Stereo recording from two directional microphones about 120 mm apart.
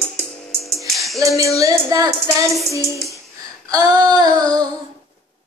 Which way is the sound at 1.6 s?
30° right (ahead or behind).